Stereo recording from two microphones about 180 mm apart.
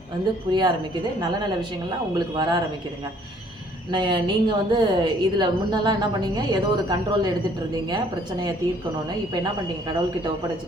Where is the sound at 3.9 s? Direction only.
25° right (ahead or behind).